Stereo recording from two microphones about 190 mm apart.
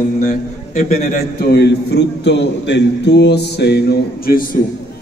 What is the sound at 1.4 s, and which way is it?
A man's voice, 60° left (ahead or behind).